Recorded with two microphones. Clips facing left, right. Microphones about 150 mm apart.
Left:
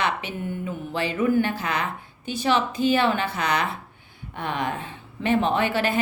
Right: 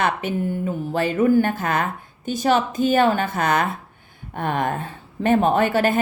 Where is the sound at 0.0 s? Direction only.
50° right (ahead or behind).